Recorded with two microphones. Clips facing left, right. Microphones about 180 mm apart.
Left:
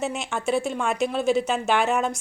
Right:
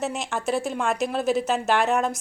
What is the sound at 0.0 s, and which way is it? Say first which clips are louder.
Speech: even; centre (ahead or behind).